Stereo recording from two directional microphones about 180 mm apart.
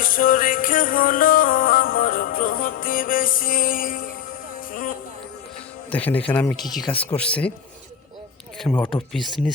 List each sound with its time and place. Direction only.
0.0 s music: 50° left (ahead or behind)
5.9 s speech: 10° left (ahead or behind)
8.5 s speech: 5° left (ahead or behind)